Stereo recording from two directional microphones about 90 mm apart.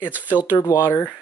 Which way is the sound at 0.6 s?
35° left (ahead or behind).